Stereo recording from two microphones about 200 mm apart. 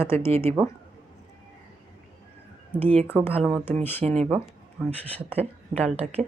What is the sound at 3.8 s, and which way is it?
Speech, 10° left (ahead or behind).